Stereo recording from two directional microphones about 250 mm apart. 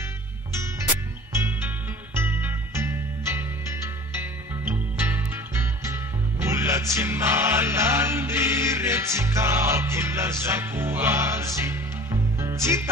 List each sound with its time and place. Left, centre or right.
2.1 s music: centre